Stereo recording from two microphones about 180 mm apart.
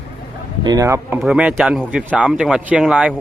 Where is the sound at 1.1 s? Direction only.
5° right (ahead or behind).